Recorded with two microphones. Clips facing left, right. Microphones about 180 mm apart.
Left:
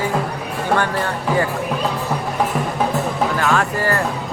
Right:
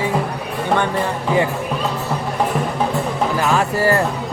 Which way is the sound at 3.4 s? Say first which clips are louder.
Right 4 dB; 15° right (ahead or behind).